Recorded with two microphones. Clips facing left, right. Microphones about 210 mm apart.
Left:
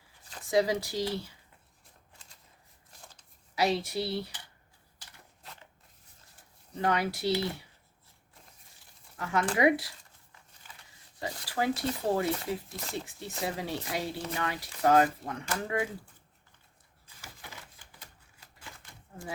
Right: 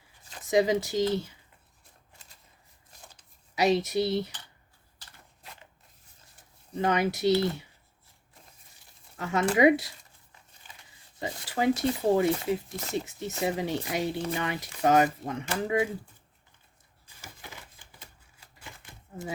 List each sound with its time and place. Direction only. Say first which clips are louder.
0.5 s speech: right 3 dB; 20° right (ahead or behind)
3.5 s speech: right 4 dB; 20° right (ahead or behind)
6.7 s speech: right 3 dB; 20° right (ahead or behind)
9.1 s speech: right 4 dB; 25° right (ahead or behind)
11.2 s speech: right 3 dB; 20° right (ahead or behind)